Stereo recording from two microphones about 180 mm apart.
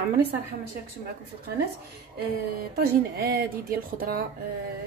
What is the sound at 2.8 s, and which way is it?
Speech, 60° right (ahead or behind).